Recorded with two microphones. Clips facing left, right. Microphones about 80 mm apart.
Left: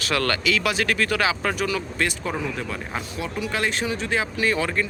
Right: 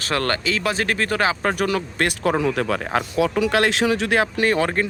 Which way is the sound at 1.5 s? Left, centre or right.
Right.